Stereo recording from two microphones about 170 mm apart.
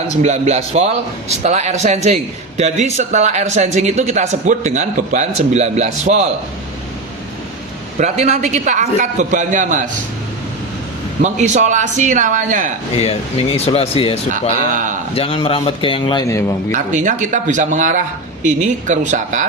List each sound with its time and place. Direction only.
0.2 s speech: 40° right (ahead or behind)
7.9 s a man's voice: 40° right (ahead or behind)
11.2 s a man's voice: 45° right (ahead or behind)
13.0 s speech: 35° left (ahead or behind); by 16.7 s 15° left (ahead or behind)
16.7 s a man's voice: 45° right (ahead or behind)